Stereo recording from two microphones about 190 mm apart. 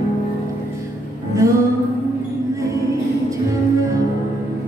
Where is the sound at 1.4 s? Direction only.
15° right (ahead or behind).